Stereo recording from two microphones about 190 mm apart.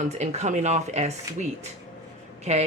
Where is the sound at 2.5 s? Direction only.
35° right (ahead or behind).